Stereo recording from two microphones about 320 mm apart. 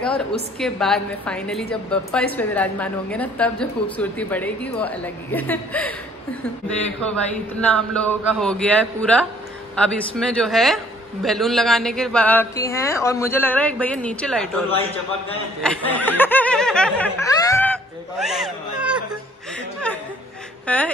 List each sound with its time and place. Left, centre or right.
0.0 s a woman's voice: centre
7.6 s a woman's voice: centre
14.7 s a man's voice: centre
15.6 s snicker: centre
18.2 s speech: centre
20.6 s speech: centre